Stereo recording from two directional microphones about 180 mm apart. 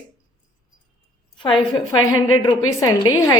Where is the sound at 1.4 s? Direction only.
30° left (ahead or behind).